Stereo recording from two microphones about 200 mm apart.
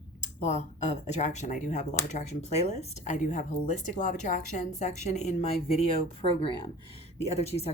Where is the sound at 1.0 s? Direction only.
35° left (ahead or behind).